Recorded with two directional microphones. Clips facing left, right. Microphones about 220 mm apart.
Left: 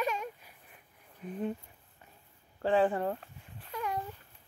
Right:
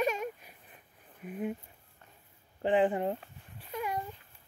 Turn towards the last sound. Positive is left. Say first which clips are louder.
# right 1 dB
turn(degrees=-25)  # may be behind; listen again after turning